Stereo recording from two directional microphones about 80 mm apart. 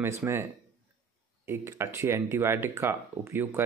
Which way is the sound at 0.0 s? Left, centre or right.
Right.